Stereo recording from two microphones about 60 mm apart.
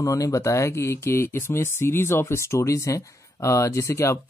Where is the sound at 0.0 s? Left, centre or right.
Left.